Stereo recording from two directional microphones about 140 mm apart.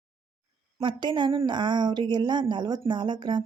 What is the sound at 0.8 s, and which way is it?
Speech, 35° right (ahead or behind).